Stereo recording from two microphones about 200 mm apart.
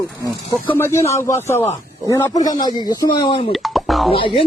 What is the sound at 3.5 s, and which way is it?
Plop, centre (ahead or behind).